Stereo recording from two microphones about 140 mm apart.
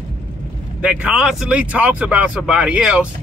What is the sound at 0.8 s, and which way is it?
A man's voice, 10° right (ahead or behind).